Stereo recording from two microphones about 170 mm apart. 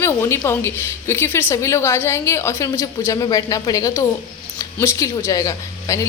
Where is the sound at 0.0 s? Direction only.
15° left (ahead or behind).